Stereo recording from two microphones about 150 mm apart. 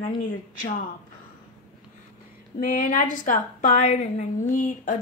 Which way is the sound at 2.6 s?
60° left (ahead or behind).